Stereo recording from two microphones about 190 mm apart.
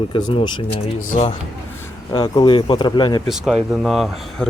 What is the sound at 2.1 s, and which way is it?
Speech, 25° left (ahead or behind).